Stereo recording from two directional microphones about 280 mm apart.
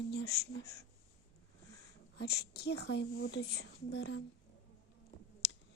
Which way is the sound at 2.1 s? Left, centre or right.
Left.